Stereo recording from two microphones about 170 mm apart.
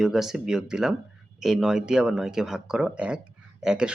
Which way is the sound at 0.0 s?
Centre (ahead or behind).